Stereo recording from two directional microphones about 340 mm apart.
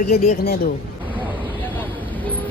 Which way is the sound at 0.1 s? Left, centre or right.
Centre.